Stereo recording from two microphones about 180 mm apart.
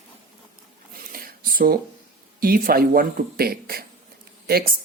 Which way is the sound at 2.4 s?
55° right (ahead or behind).